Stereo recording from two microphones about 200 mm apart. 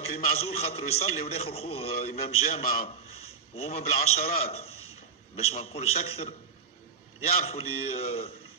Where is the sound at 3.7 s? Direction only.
40° left (ahead or behind).